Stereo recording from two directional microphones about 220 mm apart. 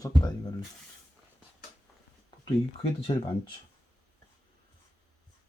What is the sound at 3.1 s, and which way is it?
Speech, 20° left (ahead or behind).